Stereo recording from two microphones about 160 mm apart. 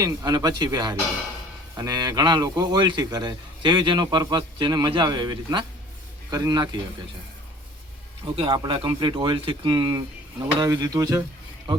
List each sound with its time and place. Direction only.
0.0 s a man's voice: 25° right (ahead or behind)
8.4 s a man's voice: 30° right (ahead or behind)